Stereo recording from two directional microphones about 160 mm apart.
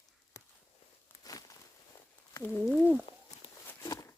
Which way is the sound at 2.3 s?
15° left (ahead or behind).